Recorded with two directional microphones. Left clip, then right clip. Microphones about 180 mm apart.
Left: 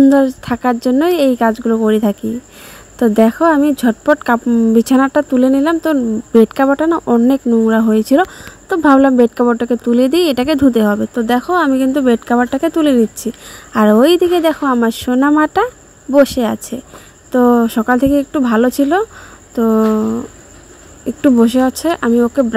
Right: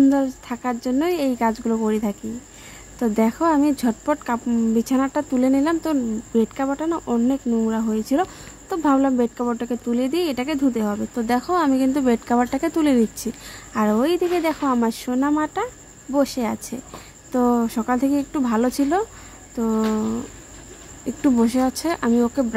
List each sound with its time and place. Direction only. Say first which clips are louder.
0.1 s speech: left 10 dB; 30° left (ahead or behind)
6.3 s speech: left 12 dB; 35° left (ahead or behind)
11.1 s speech: left 5 dB; 20° left (ahead or behind)
13.7 s speech: left 10 dB; 30° left (ahead or behind)